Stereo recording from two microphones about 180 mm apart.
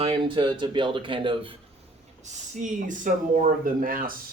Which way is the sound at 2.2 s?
40° right (ahead or behind).